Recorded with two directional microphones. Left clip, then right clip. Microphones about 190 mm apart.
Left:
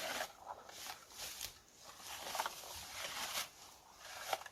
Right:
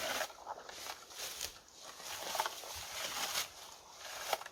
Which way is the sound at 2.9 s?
20° right (ahead or behind).